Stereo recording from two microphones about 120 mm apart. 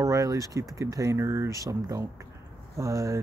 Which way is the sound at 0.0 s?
30° right (ahead or behind).